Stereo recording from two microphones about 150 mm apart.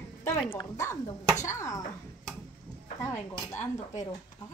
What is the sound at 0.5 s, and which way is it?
A woman's voice, 25° left (ahead or behind).